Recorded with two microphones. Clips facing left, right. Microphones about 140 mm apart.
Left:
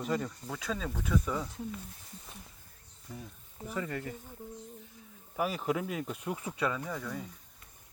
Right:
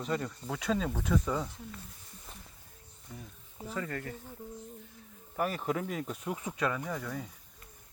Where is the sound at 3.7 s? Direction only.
15° left (ahead or behind).